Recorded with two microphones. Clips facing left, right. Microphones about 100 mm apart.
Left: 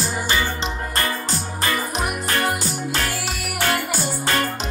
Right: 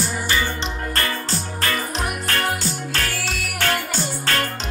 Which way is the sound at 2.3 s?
10° left (ahead or behind).